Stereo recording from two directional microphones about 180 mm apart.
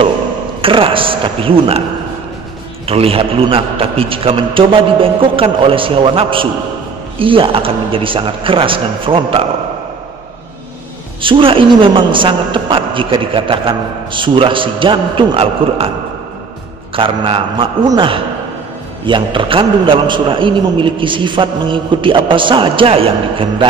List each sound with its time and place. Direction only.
0.6 s a woman's voice: 30° right (ahead or behind)
2.9 s a man's voice: 30° right (ahead or behind)
11.1 s a woman's voice: 30° right (ahead or behind)
16.9 s a woman's voice: 30° right (ahead or behind)